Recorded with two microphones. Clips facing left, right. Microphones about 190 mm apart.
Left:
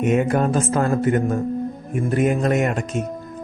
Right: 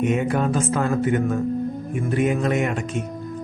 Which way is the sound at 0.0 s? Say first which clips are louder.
Left 3 dB; 45° left (ahead or behind).